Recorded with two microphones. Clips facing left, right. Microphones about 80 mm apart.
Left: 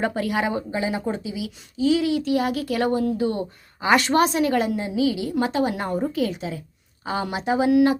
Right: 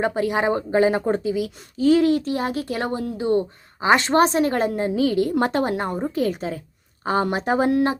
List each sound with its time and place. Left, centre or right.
0.0 s speech: right
5.7 s a woman's voice: right
6.1 s speech: right